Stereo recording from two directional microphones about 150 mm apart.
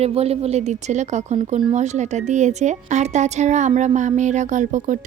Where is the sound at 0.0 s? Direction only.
45° right (ahead or behind).